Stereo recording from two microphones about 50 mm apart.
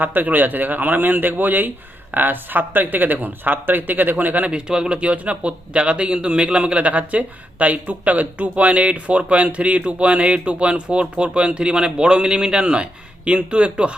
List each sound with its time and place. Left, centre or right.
0.0 s speech: right
4.5 s speech: centre